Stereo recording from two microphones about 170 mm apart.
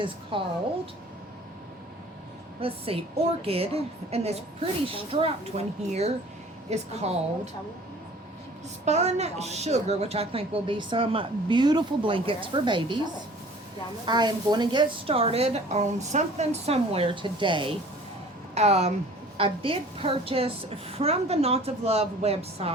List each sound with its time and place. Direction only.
0.0 s a woman's voice: 30° right (ahead or behind)
2.6 s a woman's voice: 35° right (ahead or behind)
8.8 s a woman's voice: 40° right (ahead or behind)
14.0 s a woman's voice: 25° right (ahead or behind)
18.5 s a woman's voice: 40° right (ahead or behind)